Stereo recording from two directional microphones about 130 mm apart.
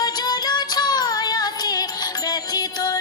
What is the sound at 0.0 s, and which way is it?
Music, 30° left (ahead or behind).